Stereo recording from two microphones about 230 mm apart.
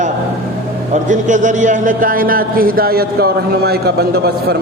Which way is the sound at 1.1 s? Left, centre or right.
Right.